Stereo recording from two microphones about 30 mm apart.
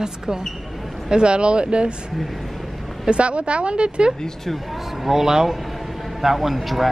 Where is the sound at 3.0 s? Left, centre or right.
Right.